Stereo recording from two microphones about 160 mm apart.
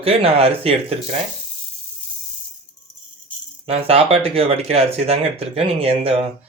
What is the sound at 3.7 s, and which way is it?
Speech, 40° right (ahead or behind).